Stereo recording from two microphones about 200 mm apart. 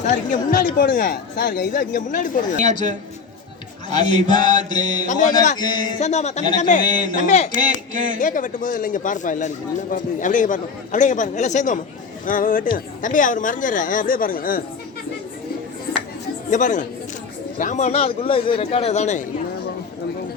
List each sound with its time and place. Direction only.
0.0 s speech: 40° left (ahead or behind)
2.6 s a sound: 35° right (ahead or behind)
3.9 s mantra: 20° left (ahead or behind)
5.0 s speech: 40° left (ahead or behind)
5.5 s mantra: 20° left (ahead or behind)
6.0 s speech: 35° left (ahead or behind)
6.8 s a sound: 40° right (ahead or behind)
7.2 s speech: 35° left (ahead or behind)
7.6 s a sound: 40° right (ahead or behind)
8.2 s speech: 40° left (ahead or behind)
16.5 s speech: 40° left (ahead or behind)